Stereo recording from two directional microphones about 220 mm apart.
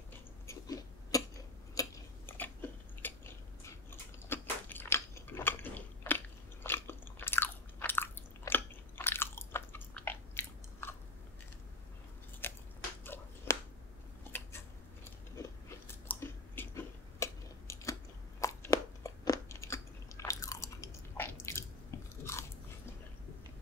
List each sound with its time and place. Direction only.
0.5 s chewing: 15° left (ahead or behind)
1.8 s a sound: 10° left (ahead or behind)
3.0 s biting: 10° left (ahead or behind)
12.4 s chewing: 10° left (ahead or behind)
13.0 s a sound: 10° left (ahead or behind)
14.3 s scissors: 10° left (ahead or behind)
15.9 s chewing: 10° left (ahead or behind)
18.4 s crunch: 15° left (ahead or behind)
22.2 s biting: 10° left (ahead or behind)